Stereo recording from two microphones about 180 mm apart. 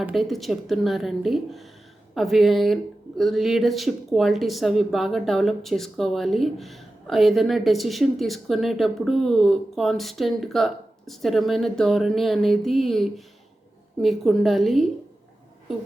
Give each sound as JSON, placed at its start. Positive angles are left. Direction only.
{"t": 0.0, "sound": "speech", "side_deg": 0}